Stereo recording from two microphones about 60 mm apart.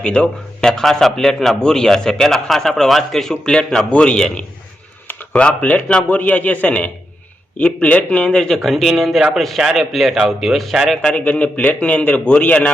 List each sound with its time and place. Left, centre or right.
0.0 s a man's voice: centre
11.2 s a man's voice: left